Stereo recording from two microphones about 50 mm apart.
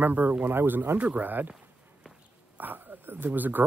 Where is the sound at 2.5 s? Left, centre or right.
Right.